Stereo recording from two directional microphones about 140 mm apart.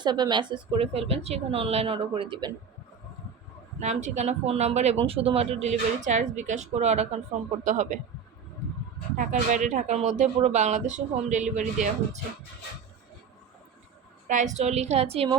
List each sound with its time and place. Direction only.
0.0 s speech: 30° right (ahead or behind)
3.8 s speech: 55° right (ahead or behind)
7.6 s speech: 60° right (ahead or behind)
9.1 s speech: 60° right (ahead or behind)
14.3 s speech: 60° right (ahead or behind)